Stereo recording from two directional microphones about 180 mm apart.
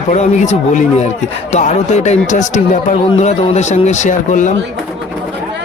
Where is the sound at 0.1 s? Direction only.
40° left (ahead or behind).